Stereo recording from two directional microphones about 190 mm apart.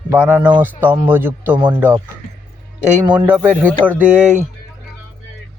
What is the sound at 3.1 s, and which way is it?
A man's voice, 10° right (ahead or behind).